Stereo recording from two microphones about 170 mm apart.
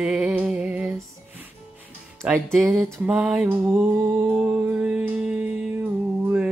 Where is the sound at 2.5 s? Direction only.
15° right (ahead or behind).